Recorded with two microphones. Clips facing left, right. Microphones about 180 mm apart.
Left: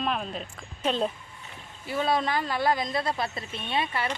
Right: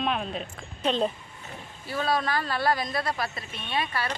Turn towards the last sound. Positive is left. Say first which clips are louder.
# left 1 dB
turn(degrees=20)  # may be behind; listen again after turning